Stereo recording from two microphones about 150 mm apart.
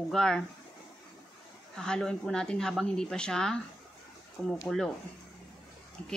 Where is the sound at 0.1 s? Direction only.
5° left (ahead or behind).